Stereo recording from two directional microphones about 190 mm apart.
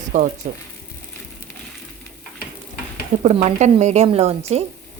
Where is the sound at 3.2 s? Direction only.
35° right (ahead or behind).